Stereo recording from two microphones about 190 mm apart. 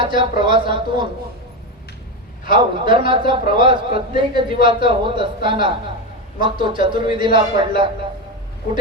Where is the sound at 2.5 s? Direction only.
25° right (ahead or behind).